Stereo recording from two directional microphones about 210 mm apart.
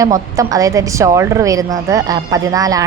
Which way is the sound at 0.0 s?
15° right (ahead or behind).